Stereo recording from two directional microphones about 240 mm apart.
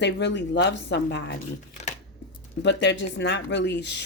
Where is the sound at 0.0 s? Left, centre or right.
Left.